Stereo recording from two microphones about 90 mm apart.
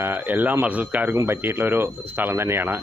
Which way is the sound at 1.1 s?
30° right (ahead or behind).